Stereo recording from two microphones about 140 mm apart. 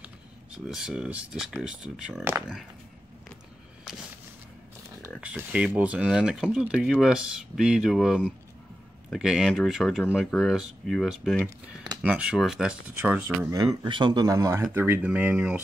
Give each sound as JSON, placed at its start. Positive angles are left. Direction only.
{"t": 0.7, "sound": "speech", "side_deg": -5}
{"t": 5.2, "sound": "speech", "side_deg": -10}
{"t": 11.4, "sound": "speech", "side_deg": -30}
{"t": 12.0, "sound": "speech", "side_deg": -10}
{"t": 13.5, "sound": "speech", "side_deg": -25}